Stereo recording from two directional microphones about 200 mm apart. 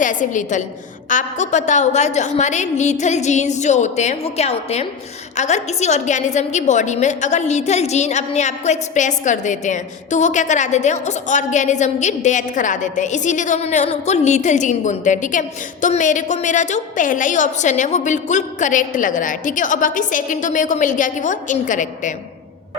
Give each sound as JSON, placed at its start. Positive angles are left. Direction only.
{"t": 0.0, "sound": "a woman's voice", "side_deg": 40}